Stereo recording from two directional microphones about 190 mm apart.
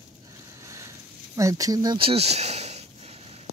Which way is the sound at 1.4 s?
15° right (ahead or behind).